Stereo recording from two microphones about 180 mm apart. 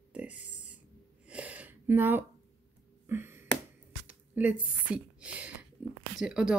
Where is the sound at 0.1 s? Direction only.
10° right (ahead or behind).